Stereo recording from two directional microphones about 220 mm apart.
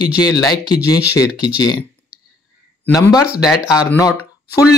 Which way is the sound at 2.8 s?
15° left (ahead or behind).